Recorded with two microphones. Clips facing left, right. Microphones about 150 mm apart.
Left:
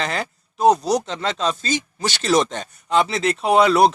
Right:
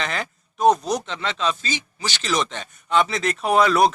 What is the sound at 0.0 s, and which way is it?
Speech, 35° left (ahead or behind).